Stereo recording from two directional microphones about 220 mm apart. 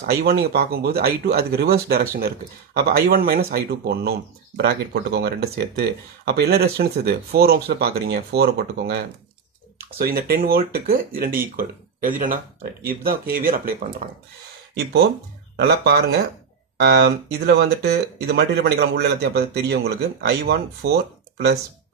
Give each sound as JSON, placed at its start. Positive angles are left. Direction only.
{"t": 0.0, "sound": "speech", "side_deg": -45}
{"t": 15.5, "sound": "speech", "side_deg": -50}